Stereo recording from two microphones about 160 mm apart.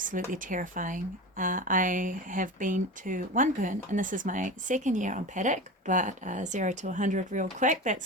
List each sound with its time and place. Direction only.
0.3 s speech: 55° right (ahead or behind)